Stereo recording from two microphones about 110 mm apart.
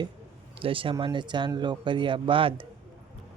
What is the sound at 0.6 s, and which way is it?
Speech, 50° right (ahead or behind).